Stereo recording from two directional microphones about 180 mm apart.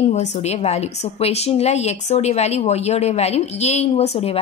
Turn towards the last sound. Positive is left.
turn(degrees=35)  # may be behind; listen again after turning